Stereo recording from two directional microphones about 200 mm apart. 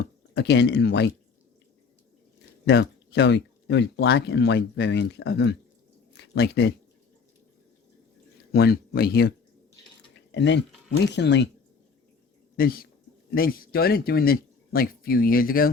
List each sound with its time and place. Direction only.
0.3 s speech: 55° left (ahead or behind)
2.6 s speech: 60° left (ahead or behind)
8.5 s speech: 50° left (ahead or behind)
10.3 s speech: 60° left (ahead or behind)
12.5 s speech: 50° left (ahead or behind)